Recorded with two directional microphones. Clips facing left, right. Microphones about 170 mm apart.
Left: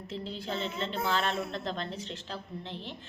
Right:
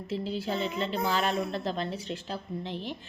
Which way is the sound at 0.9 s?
Centre (ahead or behind).